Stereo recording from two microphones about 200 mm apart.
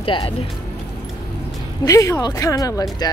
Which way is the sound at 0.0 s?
25° left (ahead or behind).